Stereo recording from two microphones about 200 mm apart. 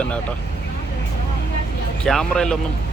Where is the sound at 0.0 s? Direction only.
5° left (ahead or behind).